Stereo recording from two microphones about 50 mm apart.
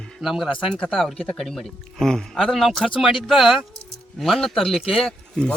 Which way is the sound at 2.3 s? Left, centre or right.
Centre.